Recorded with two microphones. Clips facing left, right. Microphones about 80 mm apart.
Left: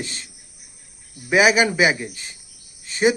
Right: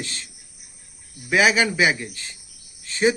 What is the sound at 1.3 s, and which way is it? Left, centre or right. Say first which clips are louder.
Speech: left 2 dB; centre.